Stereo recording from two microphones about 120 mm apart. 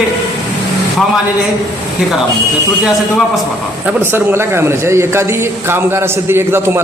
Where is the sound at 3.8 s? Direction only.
15° right (ahead or behind).